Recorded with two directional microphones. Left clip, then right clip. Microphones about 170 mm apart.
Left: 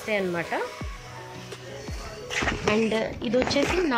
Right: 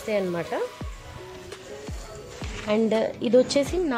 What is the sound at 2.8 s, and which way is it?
Speech, 75° right (ahead or behind).